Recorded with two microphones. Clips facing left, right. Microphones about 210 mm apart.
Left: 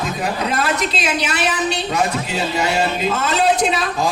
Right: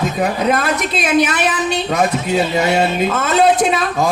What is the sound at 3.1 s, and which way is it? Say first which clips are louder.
A woman's voice: right 3 dB; 50° right (ahead or behind).